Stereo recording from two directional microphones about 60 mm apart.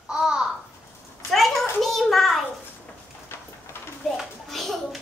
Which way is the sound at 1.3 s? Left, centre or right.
Centre.